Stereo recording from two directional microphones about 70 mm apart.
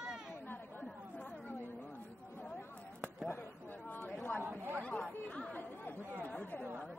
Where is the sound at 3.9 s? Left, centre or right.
Left.